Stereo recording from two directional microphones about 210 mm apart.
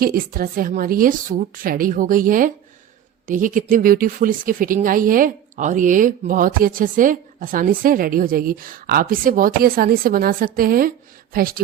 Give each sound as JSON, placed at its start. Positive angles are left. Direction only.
{"t": 0.0, "sound": "a woman's voice", "side_deg": -45}